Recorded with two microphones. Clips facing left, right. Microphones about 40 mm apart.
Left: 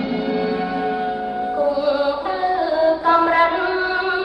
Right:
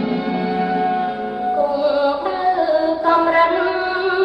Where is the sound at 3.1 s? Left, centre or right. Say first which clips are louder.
Right 4 dB; centre.